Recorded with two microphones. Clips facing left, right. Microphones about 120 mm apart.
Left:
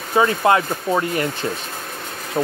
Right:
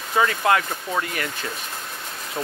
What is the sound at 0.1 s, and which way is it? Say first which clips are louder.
Speech: left 4 dB; 30° left (ahead or behind).